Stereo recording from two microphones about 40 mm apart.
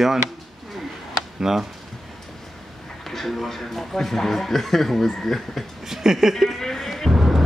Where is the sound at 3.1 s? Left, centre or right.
Centre.